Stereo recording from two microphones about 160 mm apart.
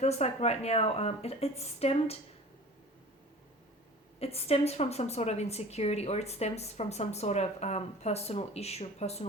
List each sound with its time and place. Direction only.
0.0 s a woman's voice: 45° left (ahead or behind)
4.2 s a woman's voice: 40° left (ahead or behind)